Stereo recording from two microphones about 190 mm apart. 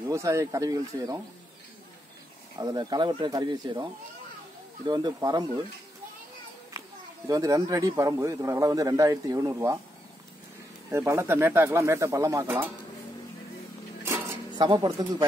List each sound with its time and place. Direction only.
0.1 s a man's voice: 15° right (ahead or behind)
2.6 s speech: 20° right (ahead or behind)
7.2 s a man's voice: 20° right (ahead or behind)
10.9 s a man's voice: 15° right (ahead or behind)
14.0 s a sound: 15° right (ahead or behind)
14.7 s speech: 20° right (ahead or behind)